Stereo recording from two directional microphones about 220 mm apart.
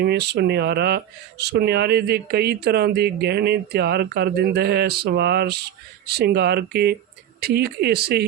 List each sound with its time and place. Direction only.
0.0 s speech: 50° right (ahead or behind)